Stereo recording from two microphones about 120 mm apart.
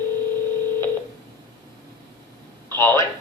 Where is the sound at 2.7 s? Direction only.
20° left (ahead or behind).